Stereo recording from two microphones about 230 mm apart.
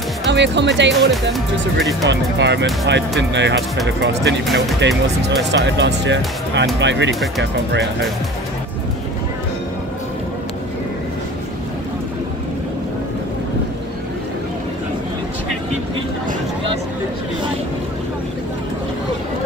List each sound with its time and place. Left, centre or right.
0.3 s speech: right
1.1 s speech: centre
2.0 s speech: right